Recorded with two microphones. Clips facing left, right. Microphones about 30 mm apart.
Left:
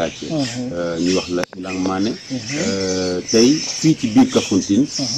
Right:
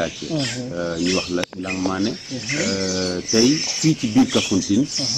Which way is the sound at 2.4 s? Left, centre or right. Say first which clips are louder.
Even; right.